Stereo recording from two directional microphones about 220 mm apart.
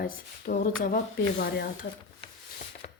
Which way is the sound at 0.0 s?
40° left (ahead or behind).